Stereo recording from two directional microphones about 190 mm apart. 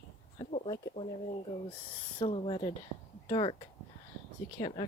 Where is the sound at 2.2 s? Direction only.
30° left (ahead or behind).